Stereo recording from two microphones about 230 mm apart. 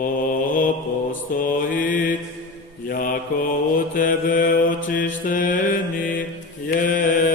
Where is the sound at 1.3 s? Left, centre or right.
Left.